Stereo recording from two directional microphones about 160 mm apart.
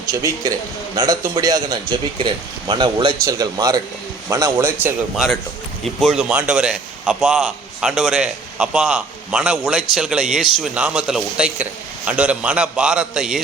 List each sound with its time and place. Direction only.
0.0 s a man's voice: 20° right (ahead or behind)
5.1 s a man's voice: centre (ahead or behind)